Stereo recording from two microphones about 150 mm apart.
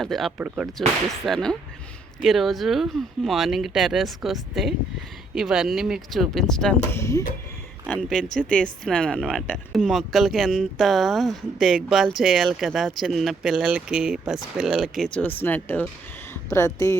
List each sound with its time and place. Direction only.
0.0 s a woman's voice: centre (ahead or behind)
0.8 s a woman's voice: centre (ahead or behind)
6.9 s speech: 20° left (ahead or behind)
7.9 s a woman's voice: 5° left (ahead or behind)
15.2 s speech: 15° left (ahead or behind)